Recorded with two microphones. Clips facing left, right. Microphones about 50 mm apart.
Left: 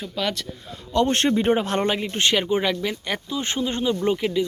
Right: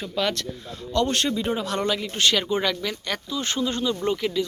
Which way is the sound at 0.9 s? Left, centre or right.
Left.